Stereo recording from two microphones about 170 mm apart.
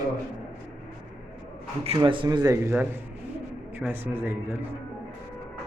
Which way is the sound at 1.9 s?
25° right (ahead or behind).